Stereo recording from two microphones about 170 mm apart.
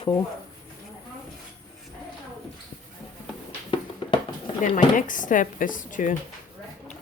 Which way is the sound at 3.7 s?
30° left (ahead or behind).